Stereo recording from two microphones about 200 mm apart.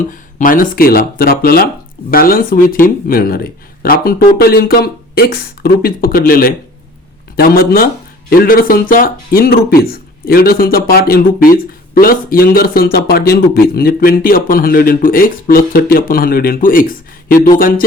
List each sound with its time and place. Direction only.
0.3 s speech: 45° left (ahead or behind)